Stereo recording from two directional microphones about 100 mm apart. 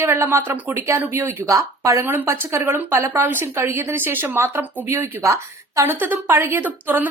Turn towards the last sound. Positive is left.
turn(degrees=-20)  # may be behind; listen again after turning